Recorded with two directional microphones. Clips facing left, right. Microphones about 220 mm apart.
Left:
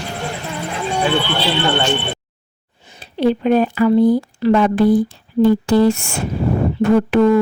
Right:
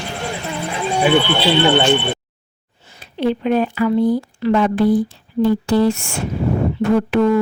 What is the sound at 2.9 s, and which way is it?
Speech, 40° left (ahead or behind).